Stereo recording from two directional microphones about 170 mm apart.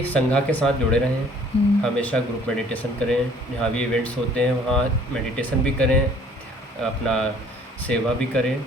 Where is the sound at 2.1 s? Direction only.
5° left (ahead or behind).